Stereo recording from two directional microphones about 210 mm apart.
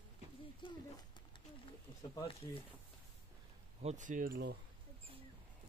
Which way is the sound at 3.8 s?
35° right (ahead or behind).